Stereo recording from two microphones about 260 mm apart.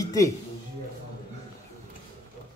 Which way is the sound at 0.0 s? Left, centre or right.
Centre.